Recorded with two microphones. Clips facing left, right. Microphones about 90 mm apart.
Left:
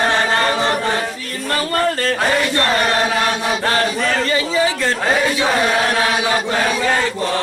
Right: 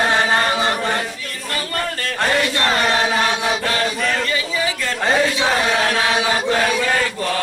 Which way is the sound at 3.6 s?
35° left (ahead or behind).